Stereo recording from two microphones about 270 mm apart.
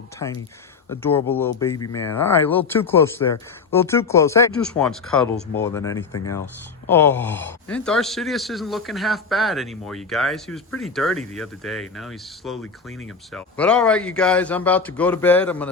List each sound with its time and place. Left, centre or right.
0.9 s speech: centre